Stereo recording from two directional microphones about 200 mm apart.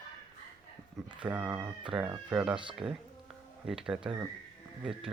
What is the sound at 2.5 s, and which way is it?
Speech, 25° right (ahead or behind).